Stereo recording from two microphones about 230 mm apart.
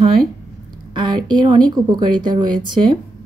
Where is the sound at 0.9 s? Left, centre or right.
Centre.